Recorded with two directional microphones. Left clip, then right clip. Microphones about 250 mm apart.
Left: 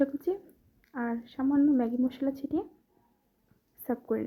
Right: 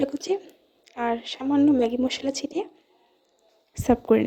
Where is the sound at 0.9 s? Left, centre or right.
Right.